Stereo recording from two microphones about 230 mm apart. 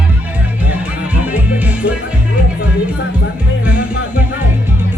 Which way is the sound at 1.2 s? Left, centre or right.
Centre.